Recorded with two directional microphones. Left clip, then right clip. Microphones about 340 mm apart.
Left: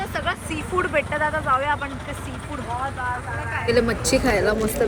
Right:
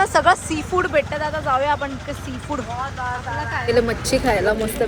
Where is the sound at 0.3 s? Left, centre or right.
Centre.